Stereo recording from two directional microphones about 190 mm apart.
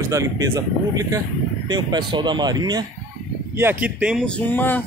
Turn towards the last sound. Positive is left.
turn(degrees=10)  # may be behind; listen again after turning